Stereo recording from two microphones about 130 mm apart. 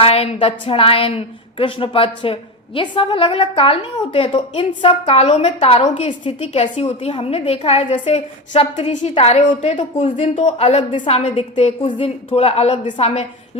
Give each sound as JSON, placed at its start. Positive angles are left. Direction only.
{"t": 0.0, "sound": "a woman's voice", "side_deg": 45}